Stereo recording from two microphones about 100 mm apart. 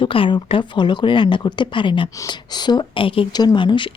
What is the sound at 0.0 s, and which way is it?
Speech, 60° left (ahead or behind).